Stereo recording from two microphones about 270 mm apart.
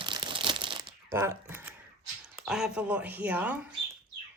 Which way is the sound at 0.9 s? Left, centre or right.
Centre.